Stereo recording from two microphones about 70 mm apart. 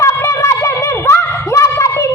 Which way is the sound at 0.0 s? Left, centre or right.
Left.